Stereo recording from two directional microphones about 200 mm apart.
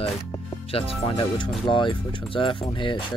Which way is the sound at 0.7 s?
30° left (ahead or behind).